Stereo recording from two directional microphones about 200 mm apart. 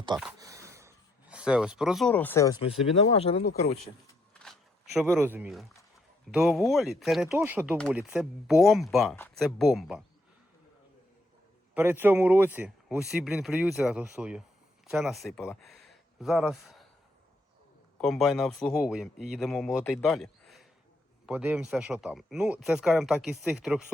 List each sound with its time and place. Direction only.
0.3 s a sound: 15° right (ahead or behind); by 2.6 s 15° left (ahead or behind)
3.1 s speech: 30° left (ahead or behind)
5.1 s a man's voice: 10° right (ahead or behind)
11.7 s a man's voice: 10° right (ahead or behind)
17.9 s a man's voice: centre (ahead or behind)